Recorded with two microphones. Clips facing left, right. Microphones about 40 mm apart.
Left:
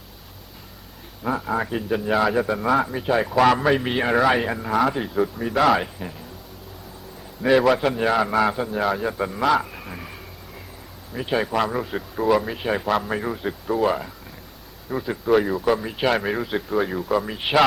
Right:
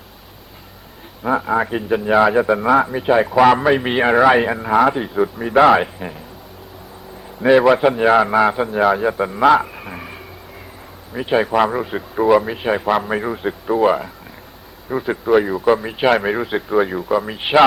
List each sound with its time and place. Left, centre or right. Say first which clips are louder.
1.2 s a man's voice: right 6 dB; right
7.4 s a man's voice: right 6 dB; centre
15.3 s speech: right 4 dB; centre